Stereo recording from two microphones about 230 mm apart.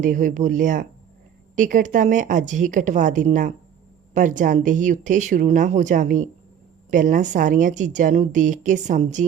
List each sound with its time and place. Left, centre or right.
0.0 s speech: right